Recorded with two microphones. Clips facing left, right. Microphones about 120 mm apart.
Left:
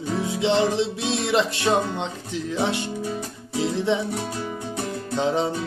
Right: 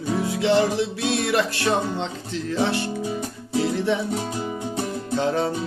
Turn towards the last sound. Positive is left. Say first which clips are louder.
# even
turn(degrees=20)  # may be behind; listen again after turning